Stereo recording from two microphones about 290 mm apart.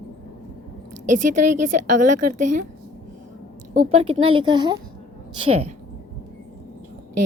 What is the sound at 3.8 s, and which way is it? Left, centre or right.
A woman's voice, right.